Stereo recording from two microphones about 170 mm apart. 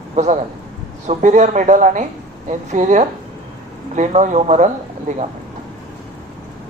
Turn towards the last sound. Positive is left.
turn(degrees=-45)  # may be behind; listen again after turning